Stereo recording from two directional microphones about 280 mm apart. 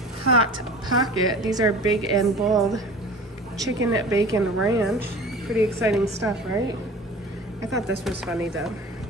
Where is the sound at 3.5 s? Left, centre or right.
Centre.